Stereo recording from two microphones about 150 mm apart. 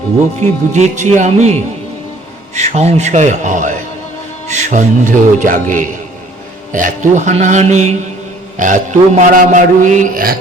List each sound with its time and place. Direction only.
0.7 s speech: 50° right (ahead or behind)
2.6 s a man's voice: 50° right (ahead or behind); by 10.3 s 65° right (ahead or behind)